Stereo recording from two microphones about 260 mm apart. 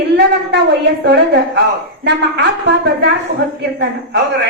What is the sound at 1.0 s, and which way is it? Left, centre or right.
A woman's voice, right.